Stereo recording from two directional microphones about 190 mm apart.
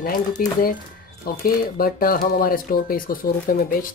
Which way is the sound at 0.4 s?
50° left (ahead or behind).